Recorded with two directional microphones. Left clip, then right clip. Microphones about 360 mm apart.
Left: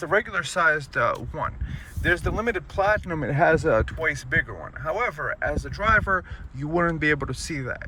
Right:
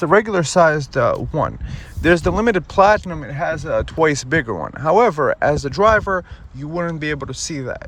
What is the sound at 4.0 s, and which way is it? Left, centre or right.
Speech, centre.